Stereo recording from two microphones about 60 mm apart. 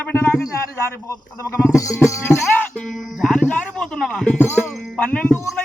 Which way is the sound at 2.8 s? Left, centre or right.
Centre.